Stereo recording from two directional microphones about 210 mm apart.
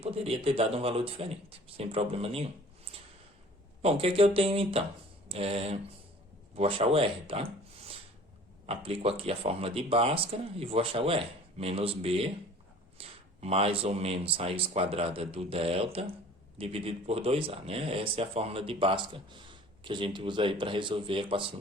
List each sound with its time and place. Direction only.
0.0 s speech: 25° right (ahead or behind)
3.8 s speech: 30° right (ahead or behind)
8.6 s speech: 25° right (ahead or behind)